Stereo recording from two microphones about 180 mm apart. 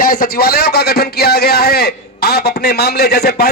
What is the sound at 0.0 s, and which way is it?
A man's voice, 55° left (ahead or behind).